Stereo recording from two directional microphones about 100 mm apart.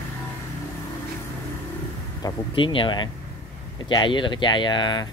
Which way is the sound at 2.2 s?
40° left (ahead or behind).